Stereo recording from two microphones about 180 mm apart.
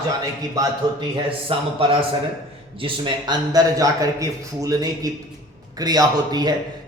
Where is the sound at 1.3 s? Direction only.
30° right (ahead or behind).